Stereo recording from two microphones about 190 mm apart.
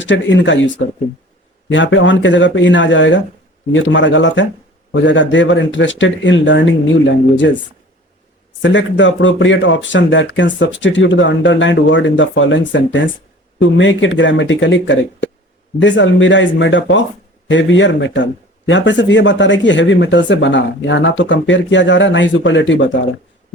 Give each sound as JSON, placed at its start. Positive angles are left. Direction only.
{"t": 0.0, "sound": "speech", "side_deg": 75}
{"t": 1.7, "sound": "speech", "side_deg": 80}
{"t": 8.6, "sound": "speech", "side_deg": 75}